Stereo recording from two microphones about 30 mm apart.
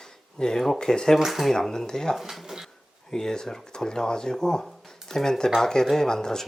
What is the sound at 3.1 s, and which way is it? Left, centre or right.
Speech, left.